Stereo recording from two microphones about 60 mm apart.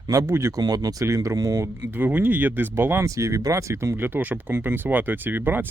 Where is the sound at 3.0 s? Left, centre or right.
Right.